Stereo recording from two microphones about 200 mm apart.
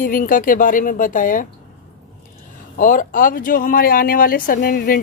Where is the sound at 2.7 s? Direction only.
40° left (ahead or behind).